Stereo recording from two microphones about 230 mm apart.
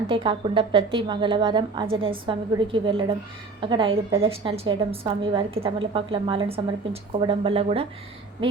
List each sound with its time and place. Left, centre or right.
0.1 s a woman's voice: right